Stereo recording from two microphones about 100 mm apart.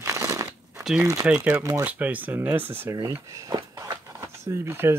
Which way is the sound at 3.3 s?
30° right (ahead or behind).